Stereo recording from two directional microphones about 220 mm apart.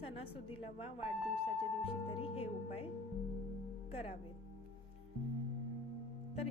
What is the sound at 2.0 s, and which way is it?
Speech, 25° left (ahead or behind).